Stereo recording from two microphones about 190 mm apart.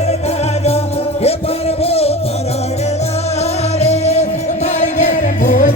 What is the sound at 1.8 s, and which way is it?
Music, 30° left (ahead or behind).